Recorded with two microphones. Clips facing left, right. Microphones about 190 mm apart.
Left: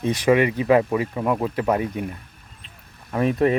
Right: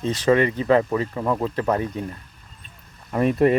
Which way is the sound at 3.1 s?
Centre (ahead or behind).